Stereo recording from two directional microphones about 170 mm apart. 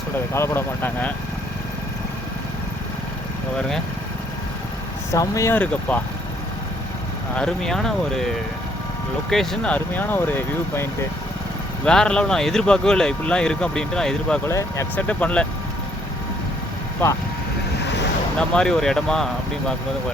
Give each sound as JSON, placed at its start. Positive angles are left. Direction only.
{"t": 0.3, "sound": "speech", "side_deg": 15}
{"t": 5.1, "sound": "speech", "side_deg": 20}
{"t": 5.5, "sound": "speech", "side_deg": 10}
{"t": 7.3, "sound": "speech", "side_deg": 5}
{"t": 9.3, "sound": "speech", "side_deg": 0}
{"t": 11.9, "sound": "speech", "side_deg": 5}
{"t": 17.0, "sound": "speech", "side_deg": 15}
{"t": 18.3, "sound": "speech", "side_deg": 5}